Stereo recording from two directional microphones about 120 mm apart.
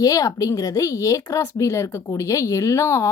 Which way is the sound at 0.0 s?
30° left (ahead or behind).